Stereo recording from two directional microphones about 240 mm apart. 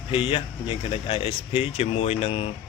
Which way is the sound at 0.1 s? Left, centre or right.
Left.